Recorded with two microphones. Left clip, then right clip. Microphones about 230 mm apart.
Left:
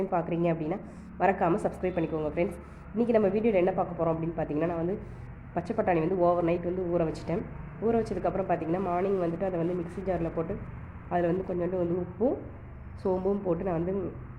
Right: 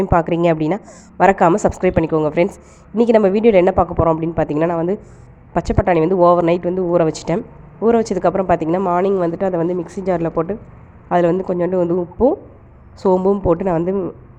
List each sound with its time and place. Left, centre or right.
0.0 s speech: right